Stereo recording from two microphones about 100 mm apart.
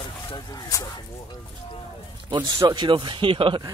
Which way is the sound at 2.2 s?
50° right (ahead or behind).